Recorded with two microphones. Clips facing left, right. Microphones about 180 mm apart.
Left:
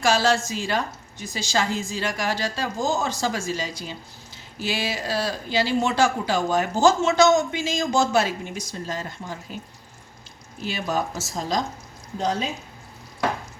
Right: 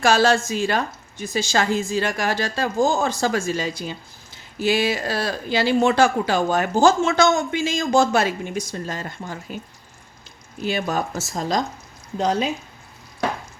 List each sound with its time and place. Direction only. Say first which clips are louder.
0.0 s speech: right 3 dB; 55° right (ahead or behind)
10.6 s speech: right 3 dB; 55° right (ahead or behind)